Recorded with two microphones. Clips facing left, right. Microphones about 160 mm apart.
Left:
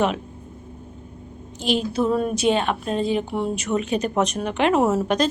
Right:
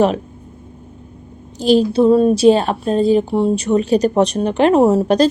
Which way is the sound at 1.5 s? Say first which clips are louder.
Right 9 dB; 35° right (ahead or behind).